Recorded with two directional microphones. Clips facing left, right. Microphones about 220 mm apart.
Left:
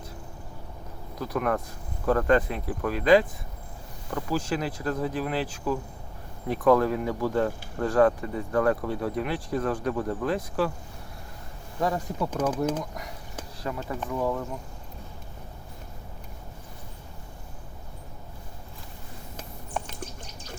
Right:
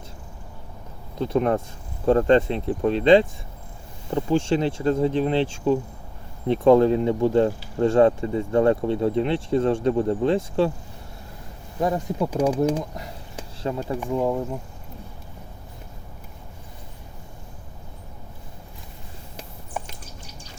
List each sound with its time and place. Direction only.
1.2 s speech: 25° right (ahead or behind)
11.8 s speech: 20° right (ahead or behind)
12.3 s speech: 10° right (ahead or behind)
13.7 s speech: 25° right (ahead or behind)
19.8 s bird: 5° right (ahead or behind)